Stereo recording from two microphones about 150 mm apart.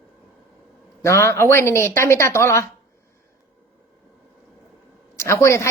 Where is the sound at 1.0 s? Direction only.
20° left (ahead or behind).